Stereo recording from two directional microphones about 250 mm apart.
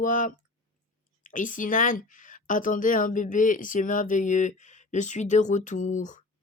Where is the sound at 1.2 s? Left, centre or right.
Left.